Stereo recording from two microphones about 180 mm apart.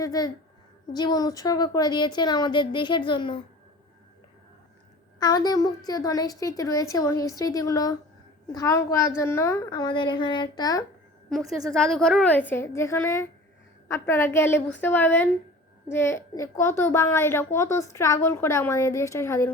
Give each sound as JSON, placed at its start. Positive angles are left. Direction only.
{"t": 0.0, "sound": "a woman's voice", "side_deg": 20}
{"t": 5.2, "sound": "a woman's voice", "side_deg": 20}
{"t": 11.3, "sound": "a child's voice", "side_deg": 0}